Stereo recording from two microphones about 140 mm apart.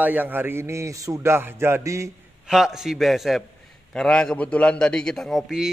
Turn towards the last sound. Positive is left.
turn(degrees=0)  # may be behind; listen again after turning